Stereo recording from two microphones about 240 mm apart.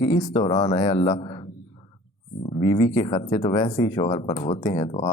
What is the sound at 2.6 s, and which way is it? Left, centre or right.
Speech, centre.